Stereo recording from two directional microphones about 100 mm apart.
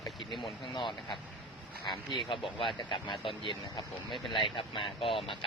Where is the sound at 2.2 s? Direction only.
60° left (ahead or behind).